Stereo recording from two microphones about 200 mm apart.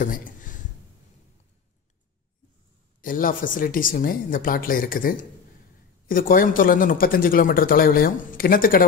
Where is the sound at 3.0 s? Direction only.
45° left (ahead or behind).